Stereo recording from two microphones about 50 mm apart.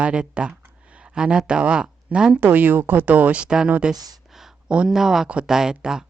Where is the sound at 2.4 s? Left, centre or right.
Right.